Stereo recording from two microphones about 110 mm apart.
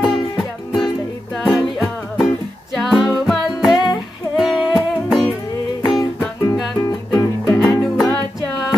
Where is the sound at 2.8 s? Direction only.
Centre (ahead or behind).